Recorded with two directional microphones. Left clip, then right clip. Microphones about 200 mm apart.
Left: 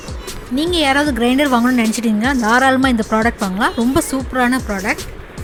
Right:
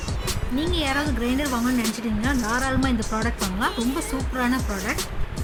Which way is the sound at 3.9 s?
35° left (ahead or behind).